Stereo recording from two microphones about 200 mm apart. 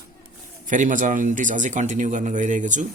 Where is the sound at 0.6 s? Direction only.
40° right (ahead or behind).